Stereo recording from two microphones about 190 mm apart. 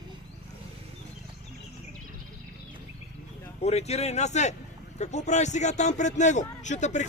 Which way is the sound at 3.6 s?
35° left (ahead or behind).